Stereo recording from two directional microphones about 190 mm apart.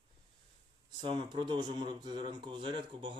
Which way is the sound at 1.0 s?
25° right (ahead or behind).